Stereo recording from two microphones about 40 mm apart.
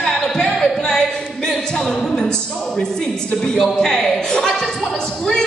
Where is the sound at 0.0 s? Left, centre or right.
Centre.